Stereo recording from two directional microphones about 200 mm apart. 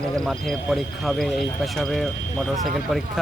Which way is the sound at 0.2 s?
Centre (ahead or behind).